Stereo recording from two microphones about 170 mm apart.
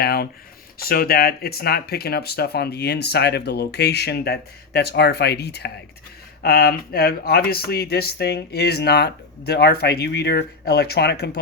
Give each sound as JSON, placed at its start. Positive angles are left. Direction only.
{"t": 0.0, "sound": "speech", "side_deg": 65}